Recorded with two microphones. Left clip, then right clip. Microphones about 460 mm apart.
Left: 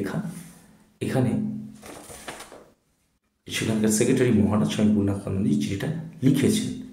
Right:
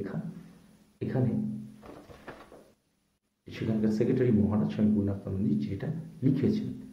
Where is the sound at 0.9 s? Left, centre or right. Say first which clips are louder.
Left 7 dB; right.